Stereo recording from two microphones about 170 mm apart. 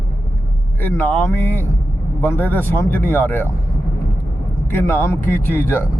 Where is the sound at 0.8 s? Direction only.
10° left (ahead or behind).